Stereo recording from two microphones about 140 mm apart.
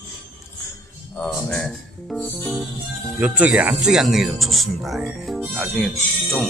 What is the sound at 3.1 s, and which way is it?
Speech, 10° right (ahead or behind).